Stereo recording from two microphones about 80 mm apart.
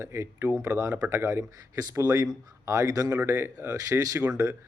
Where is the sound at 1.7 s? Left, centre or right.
Right.